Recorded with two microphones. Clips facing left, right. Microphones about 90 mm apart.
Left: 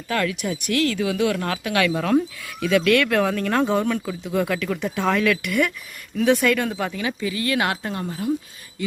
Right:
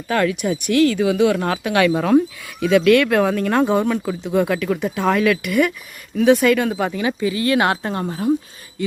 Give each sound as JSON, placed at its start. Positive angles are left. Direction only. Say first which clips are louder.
{"t": 0.1, "sound": "speech", "louder": "right 5 dB", "side_deg": -30}
{"t": 4.0, "sound": "speech", "louder": "right 5 dB", "side_deg": -35}
{"t": 4.3, "sound": "speech", "louder": "right 4 dB", "side_deg": -25}
{"t": 4.6, "sound": "speech", "louder": "right 4 dB", "side_deg": -10}
{"t": 6.8, "sound": "speech", "louder": "right 5 dB", "side_deg": -30}